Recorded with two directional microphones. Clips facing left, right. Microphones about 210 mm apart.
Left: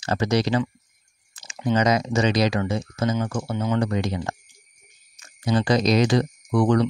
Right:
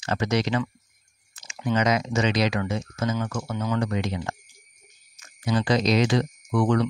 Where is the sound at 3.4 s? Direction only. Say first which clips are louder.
Left 3 dB; 25° left (ahead or behind).